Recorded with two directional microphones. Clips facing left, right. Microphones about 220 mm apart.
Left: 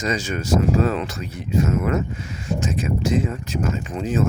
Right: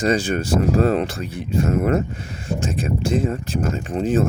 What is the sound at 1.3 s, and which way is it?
Speech, 30° right (ahead or behind).